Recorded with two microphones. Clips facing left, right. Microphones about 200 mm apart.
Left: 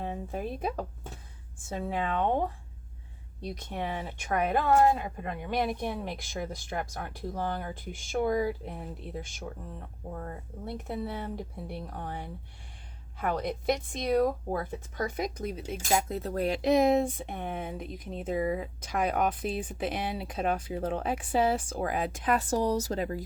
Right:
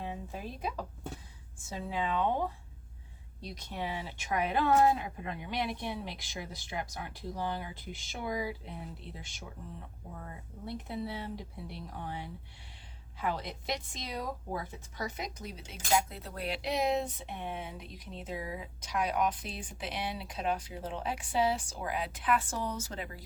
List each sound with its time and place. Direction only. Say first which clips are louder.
0.0 s speech: left 6 dB; 50° left (ahead or behind)
3.4 s speech: left 4 dB; 50° left (ahead or behind)